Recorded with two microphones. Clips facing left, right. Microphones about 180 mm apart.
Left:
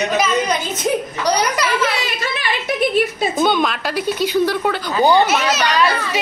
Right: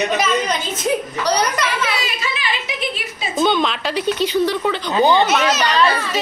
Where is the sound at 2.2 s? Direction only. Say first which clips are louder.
Left 3 dB; 55° left (ahead or behind).